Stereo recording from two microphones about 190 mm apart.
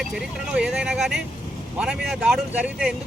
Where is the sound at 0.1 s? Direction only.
5° right (ahead or behind).